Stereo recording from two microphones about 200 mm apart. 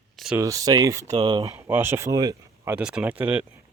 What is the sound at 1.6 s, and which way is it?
Speech, 10° right (ahead or behind).